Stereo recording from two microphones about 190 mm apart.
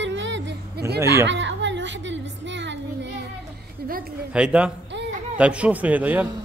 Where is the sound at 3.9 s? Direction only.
50° right (ahead or behind).